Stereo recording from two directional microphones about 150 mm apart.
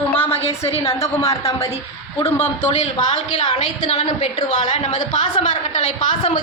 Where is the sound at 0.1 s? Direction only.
15° left (ahead or behind).